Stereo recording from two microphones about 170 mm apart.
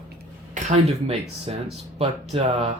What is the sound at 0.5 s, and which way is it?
Speech, 40° right (ahead or behind).